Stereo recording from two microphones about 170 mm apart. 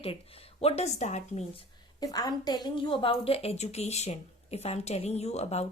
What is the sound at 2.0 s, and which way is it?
A woman's voice, 20° left (ahead or behind).